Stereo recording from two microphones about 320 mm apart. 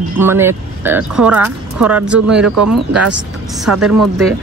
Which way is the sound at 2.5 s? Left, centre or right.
Right.